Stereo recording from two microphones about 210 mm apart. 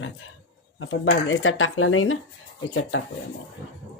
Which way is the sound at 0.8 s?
65° left (ahead or behind).